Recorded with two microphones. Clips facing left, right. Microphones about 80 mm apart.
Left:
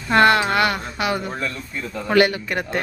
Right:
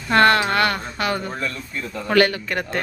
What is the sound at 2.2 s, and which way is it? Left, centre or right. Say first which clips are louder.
Speech: left 1 dB; centre.